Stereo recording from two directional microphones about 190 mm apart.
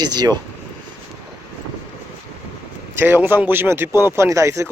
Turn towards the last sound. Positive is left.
turn(degrees=-15)  # may be behind; listen again after turning